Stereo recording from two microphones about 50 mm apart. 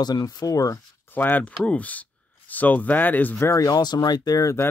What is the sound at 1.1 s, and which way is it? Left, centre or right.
Speech, left.